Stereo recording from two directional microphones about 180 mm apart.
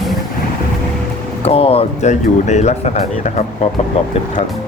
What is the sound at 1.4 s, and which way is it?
Speech, 30° left (ahead or behind).